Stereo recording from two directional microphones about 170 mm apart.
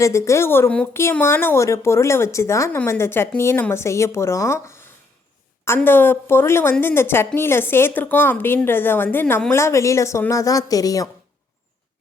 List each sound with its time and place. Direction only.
0.0 s a woman's voice: 15° left (ahead or behind)